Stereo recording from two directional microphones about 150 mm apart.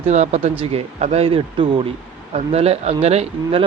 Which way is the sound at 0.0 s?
50° right (ahead or behind).